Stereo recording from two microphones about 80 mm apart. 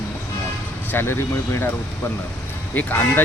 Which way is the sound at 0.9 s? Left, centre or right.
Left.